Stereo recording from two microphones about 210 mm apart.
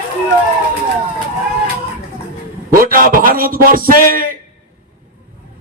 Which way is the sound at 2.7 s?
40° right (ahead or behind).